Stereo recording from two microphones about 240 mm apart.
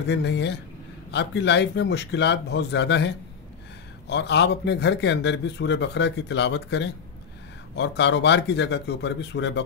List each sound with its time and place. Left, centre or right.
0.0 s a man's voice: left
4.1 s a man's voice: left